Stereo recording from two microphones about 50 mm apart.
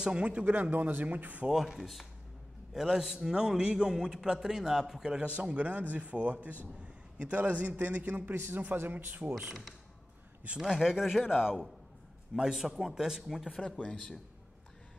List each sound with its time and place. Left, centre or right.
0.0 s a man's voice: right
0.5 s speech: right
1.5 s a man's voice: centre
5.2 s a man's voice: right
8.4 s a man's voice: right
10.6 s a man's voice: centre
13.5 s a man's voice: centre